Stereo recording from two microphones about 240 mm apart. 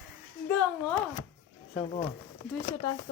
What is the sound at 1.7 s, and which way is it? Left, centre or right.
Speech, left.